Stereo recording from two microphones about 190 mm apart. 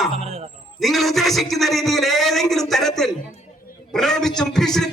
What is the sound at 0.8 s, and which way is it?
A man's voice, centre (ahead or behind).